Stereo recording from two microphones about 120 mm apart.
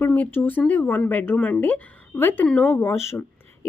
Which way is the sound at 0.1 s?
15° left (ahead or behind).